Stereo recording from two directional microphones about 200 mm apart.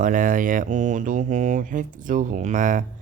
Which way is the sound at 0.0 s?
40° right (ahead or behind).